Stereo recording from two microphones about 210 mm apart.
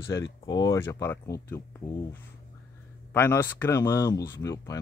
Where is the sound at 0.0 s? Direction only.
15° left (ahead or behind).